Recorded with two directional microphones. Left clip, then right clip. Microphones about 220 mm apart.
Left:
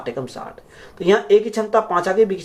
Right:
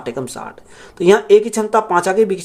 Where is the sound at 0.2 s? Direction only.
50° right (ahead or behind).